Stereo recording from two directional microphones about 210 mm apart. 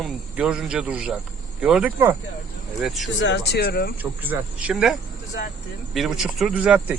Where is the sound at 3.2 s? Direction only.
60° left (ahead or behind).